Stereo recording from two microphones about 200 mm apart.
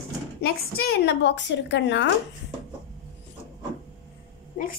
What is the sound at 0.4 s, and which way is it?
A woman's voice, 50° left (ahead or behind).